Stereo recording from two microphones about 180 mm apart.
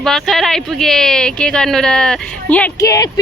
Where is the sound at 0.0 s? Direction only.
Centre (ahead or behind).